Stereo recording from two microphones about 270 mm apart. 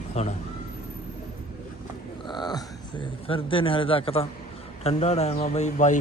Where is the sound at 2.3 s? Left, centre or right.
Centre.